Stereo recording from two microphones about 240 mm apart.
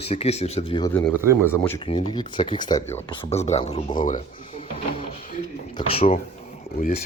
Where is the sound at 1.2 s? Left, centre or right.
Centre.